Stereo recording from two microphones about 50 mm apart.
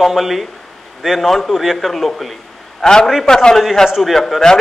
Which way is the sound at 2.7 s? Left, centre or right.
Centre.